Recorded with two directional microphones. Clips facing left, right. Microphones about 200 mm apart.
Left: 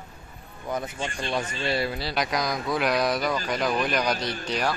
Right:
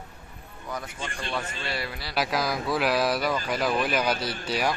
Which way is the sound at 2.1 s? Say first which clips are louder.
Even; 5° right (ahead or behind).